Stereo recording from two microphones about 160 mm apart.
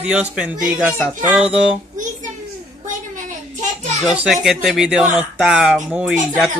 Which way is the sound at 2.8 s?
55° right (ahead or behind).